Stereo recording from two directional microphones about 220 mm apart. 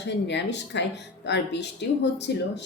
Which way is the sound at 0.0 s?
50° left (ahead or behind).